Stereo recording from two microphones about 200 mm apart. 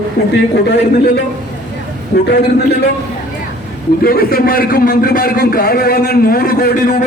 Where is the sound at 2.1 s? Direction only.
55° left (ahead or behind).